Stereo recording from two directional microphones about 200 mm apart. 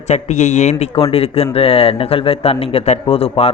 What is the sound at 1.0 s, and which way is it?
A man's voice, 25° left (ahead or behind).